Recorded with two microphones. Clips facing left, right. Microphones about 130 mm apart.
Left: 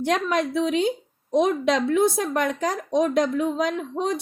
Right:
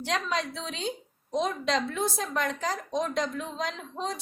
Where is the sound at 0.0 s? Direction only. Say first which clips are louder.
Left 7 dB; 55° left (ahead or behind).